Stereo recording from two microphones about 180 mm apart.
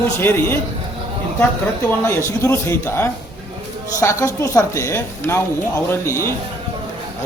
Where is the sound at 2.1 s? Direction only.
15° left (ahead or behind).